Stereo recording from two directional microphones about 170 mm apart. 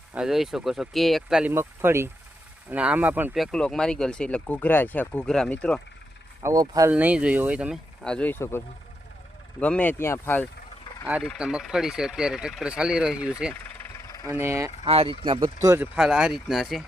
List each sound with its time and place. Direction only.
0.1 s speech: 5° right (ahead or behind)
3.3 s speech: centre (ahead or behind)
6.4 s speech: 20° right (ahead or behind)
6.9 s speech: 10° right (ahead or behind)
8.0 s speech: 5° left (ahead or behind)
11.2 s speech: centre (ahead or behind)
13.5 s vehicle: 15° left (ahead or behind)
14.3 s speech: 15° right (ahead or behind)
14.8 s speech: 35° right (ahead or behind); by 15.9 s 20° right (ahead or behind)
16.0 s speech: 5° right (ahead or behind)